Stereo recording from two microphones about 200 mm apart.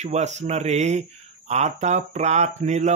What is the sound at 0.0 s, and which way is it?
A man's voice, 35° right (ahead or behind).